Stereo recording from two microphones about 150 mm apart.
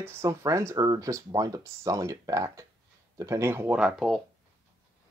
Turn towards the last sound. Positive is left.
turn(degrees=-5)  # may be behind; listen again after turning